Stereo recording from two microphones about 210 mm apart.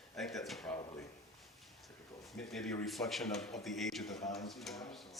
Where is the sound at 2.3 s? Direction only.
Centre (ahead or behind).